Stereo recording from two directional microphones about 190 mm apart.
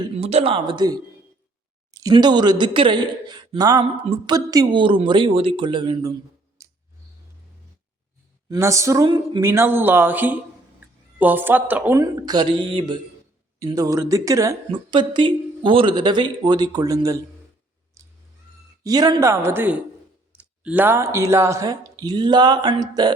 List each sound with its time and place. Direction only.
0.0 s a woman's voice: 30° right (ahead or behind)
6.6 s a sound: 15° right (ahead or behind)
8.4 s a woman's voice: 15° right (ahead or behind)
18.0 s cat: 15° right (ahead or behind)
18.8 s speech: 20° right (ahead or behind)